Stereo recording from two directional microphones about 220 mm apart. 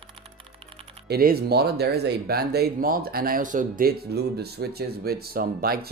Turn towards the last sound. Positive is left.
turn(degrees=-45)  # may be behind; listen again after turning